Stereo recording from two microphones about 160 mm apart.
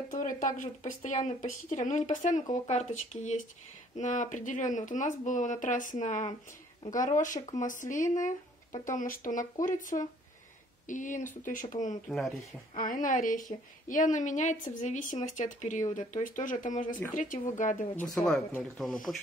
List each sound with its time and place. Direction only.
0.1 s speech: 55° left (ahead or behind)
12.1 s speech: centre (ahead or behind)
12.7 s speech: 55° left (ahead or behind)
17.9 s speech: centre (ahead or behind)